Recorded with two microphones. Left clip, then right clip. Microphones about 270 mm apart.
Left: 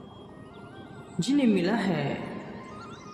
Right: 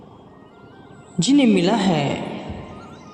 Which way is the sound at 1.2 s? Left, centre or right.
Right.